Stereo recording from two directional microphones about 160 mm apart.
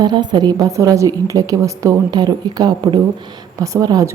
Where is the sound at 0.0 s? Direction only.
25° right (ahead or behind).